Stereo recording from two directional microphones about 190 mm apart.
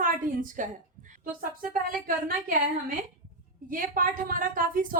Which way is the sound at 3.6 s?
45° right (ahead or behind).